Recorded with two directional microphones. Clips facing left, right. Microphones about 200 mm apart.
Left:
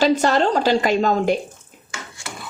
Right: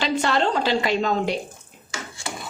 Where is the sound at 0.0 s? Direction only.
40° left (ahead or behind).